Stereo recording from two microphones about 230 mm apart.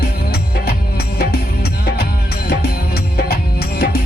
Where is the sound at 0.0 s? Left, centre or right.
Left.